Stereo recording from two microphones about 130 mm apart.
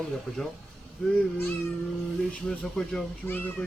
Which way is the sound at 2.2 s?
5° left (ahead or behind).